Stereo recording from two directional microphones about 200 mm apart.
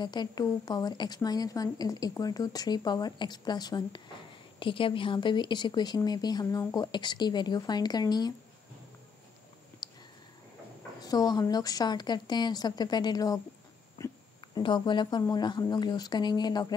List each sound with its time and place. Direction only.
0.0 s a woman's voice: 20° left (ahead or behind)
9.8 s a sound: 20° left (ahead or behind)
11.0 s a woman's voice: 20° left (ahead or behind)